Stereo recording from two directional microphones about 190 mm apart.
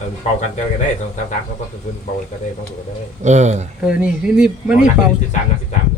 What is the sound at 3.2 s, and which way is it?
Speech, 35° right (ahead or behind).